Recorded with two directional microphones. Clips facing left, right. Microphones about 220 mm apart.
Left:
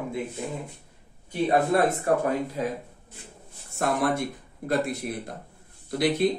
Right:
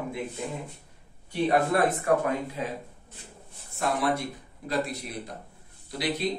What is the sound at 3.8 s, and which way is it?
Speech, 50° left (ahead or behind).